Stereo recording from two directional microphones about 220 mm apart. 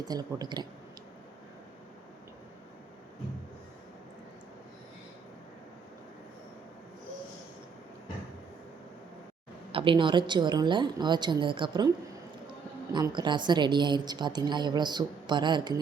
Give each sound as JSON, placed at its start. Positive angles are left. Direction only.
{"t": 0.0, "sound": "a woman's voice", "side_deg": -15}
{"t": 9.7, "sound": "a woman's voice", "side_deg": -20}
{"t": 12.9, "sound": "a woman's voice", "side_deg": -20}